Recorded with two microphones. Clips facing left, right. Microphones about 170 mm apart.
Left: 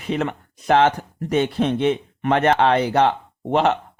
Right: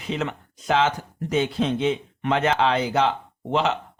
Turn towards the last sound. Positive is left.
turn(degrees=55)  # may be behind; listen again after turning